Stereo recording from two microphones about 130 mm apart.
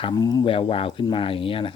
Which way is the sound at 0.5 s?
45° left (ahead or behind).